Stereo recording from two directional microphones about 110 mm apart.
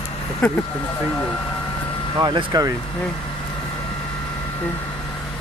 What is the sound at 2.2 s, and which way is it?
Speech, 40° right (ahead or behind).